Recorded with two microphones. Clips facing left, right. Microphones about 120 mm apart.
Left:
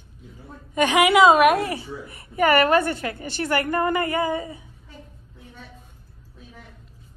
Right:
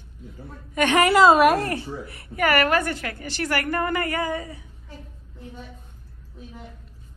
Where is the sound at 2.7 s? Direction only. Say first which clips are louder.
Left 3 dB; 25° left (ahead or behind).